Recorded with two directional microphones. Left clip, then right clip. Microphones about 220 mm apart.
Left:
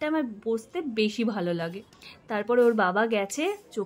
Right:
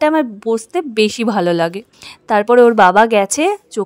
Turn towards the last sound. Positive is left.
turn(degrees=-45)  # may be behind; listen again after turning